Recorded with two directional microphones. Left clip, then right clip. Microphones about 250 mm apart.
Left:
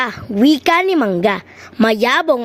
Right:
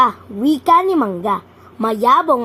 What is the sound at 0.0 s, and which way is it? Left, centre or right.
A woman's voice, left.